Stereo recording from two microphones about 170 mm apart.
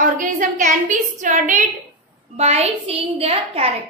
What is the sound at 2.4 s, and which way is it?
A woman's voice, 40° right (ahead or behind).